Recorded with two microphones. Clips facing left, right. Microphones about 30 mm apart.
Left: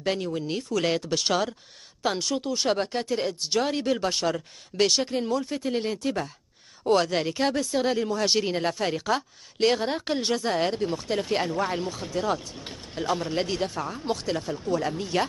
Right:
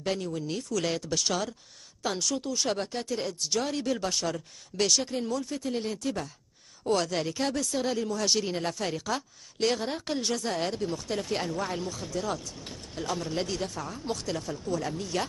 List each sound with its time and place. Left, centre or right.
0.0 s speech: left